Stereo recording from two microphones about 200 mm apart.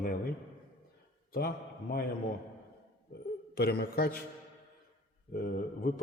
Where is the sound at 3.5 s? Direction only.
50° left (ahead or behind).